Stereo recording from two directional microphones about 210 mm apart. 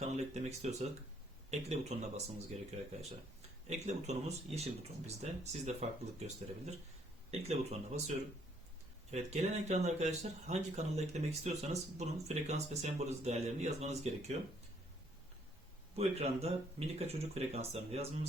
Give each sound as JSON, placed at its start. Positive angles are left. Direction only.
{"t": 0.0, "sound": "speech", "side_deg": -30}
{"t": 3.7, "sound": "speech", "side_deg": -30}
{"t": 9.1, "sound": "speech", "side_deg": -30}
{"t": 16.0, "sound": "speech", "side_deg": -30}